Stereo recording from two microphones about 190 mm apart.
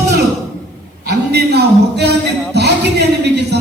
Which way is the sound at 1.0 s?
60° right (ahead or behind).